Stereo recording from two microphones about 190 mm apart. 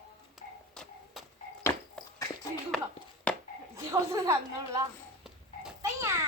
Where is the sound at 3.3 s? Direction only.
5° left (ahead or behind).